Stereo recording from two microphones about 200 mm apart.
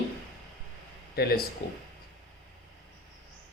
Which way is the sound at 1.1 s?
50° left (ahead or behind).